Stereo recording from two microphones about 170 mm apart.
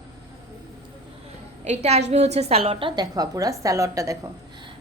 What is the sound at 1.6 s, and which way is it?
A woman's voice, 40° right (ahead or behind).